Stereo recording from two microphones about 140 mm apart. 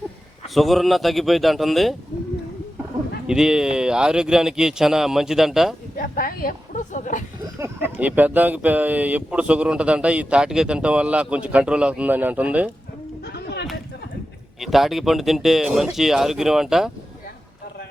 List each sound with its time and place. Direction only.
0.4 s speech: centre (ahead or behind)
3.2 s speech: 5° right (ahead or behind)
6.0 s a sound: 90° left; by 7.3 s 65° left (ahead or behind)
7.4 s speech: 15° right (ahead or behind)
14.6 s speech: centre (ahead or behind)